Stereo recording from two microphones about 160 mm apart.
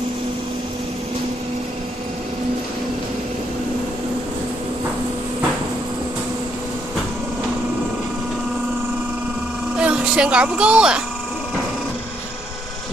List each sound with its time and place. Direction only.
9.8 s speech: 5° right (ahead or behind)